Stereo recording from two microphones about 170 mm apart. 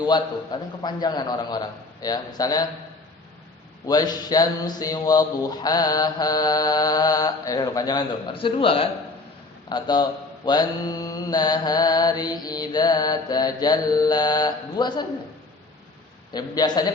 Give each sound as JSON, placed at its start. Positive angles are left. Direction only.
{"t": 0.0, "sound": "mantra", "side_deg": 25}
{"t": 3.8, "sound": "mantra", "side_deg": 25}
{"t": 16.3, "sound": "mantra", "side_deg": 25}